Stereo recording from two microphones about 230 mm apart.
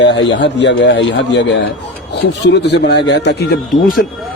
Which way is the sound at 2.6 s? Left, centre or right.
Left.